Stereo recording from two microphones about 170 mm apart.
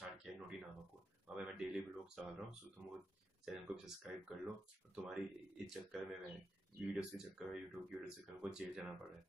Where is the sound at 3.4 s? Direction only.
5° right (ahead or behind).